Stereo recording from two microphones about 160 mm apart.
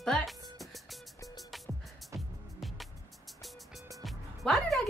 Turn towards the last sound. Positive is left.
turn(degrees=0)  # may be behind; listen again after turning